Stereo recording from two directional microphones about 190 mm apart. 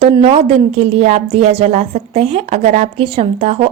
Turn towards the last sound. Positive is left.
turn(degrees=-35)  # may be behind; listen again after turning